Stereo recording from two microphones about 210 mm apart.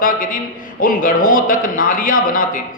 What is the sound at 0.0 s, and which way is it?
A man's voice, 40° left (ahead or behind).